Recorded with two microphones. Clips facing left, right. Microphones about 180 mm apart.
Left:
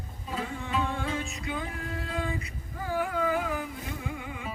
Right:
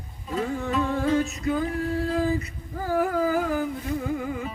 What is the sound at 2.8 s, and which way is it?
Carnatic music, 35° right (ahead or behind).